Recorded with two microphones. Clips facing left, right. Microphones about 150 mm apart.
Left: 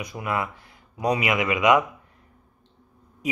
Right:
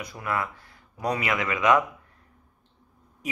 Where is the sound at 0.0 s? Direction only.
20° left (ahead or behind).